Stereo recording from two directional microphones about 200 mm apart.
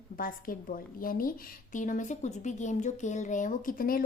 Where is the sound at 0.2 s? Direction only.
45° left (ahead or behind).